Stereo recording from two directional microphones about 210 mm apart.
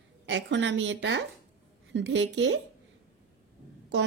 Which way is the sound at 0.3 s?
60° right (ahead or behind).